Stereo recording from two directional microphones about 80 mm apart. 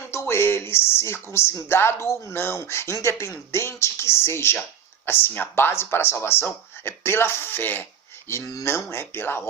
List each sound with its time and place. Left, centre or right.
0.1 s speech: left
8.3 s speech: left